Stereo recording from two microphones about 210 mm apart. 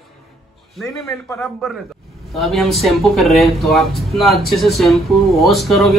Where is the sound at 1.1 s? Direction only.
Centre (ahead or behind).